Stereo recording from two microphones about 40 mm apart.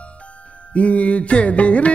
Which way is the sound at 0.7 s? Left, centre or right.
Left.